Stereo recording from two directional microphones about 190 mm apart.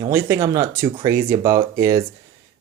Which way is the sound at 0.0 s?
15° right (ahead or behind).